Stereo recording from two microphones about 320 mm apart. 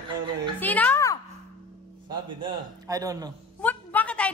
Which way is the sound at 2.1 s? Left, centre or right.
Centre.